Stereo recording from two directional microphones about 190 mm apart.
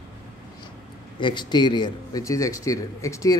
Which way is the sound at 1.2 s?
25° left (ahead or behind).